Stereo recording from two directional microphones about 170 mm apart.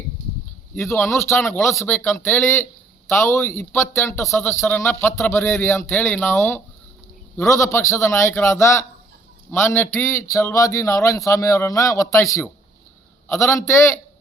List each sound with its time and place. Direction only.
0.9 s a man's voice: 15° left (ahead or behind)